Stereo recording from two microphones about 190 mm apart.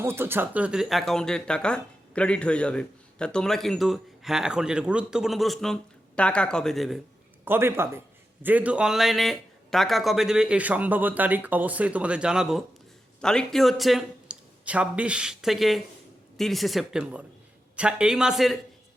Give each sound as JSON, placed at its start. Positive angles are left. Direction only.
{"t": 0.0, "sound": "speech", "side_deg": -10}
{"t": 7.4, "sound": "a man's voice", "side_deg": -10}